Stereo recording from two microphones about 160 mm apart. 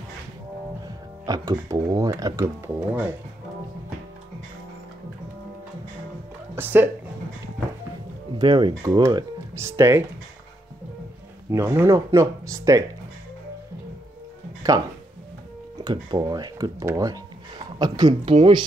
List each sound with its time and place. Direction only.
0.8 s speech: 25° right (ahead or behind)
6.5 s speech: 10° right (ahead or behind)
8.4 s speech: 30° right (ahead or behind)
11.5 s speech: 15° right (ahead or behind)
14.7 s speech: 20° right (ahead or behind)